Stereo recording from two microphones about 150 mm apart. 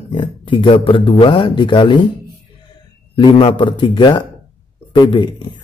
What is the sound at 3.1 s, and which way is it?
Speech, 35° left (ahead or behind).